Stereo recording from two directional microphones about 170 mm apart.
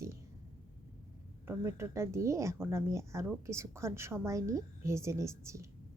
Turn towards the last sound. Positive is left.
turn(degrees=-15)  # may be behind; listen again after turning